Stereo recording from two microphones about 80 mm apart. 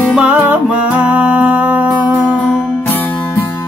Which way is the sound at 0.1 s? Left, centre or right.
Centre.